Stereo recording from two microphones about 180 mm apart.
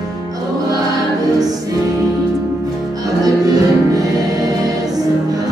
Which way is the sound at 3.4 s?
20° right (ahead or behind).